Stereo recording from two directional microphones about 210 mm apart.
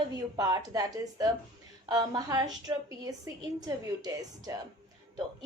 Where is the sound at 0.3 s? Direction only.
15° right (ahead or behind).